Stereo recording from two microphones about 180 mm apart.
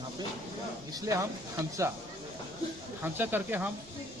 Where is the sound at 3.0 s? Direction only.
10° right (ahead or behind).